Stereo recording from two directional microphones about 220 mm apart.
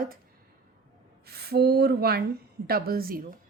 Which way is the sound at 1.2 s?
45° right (ahead or behind).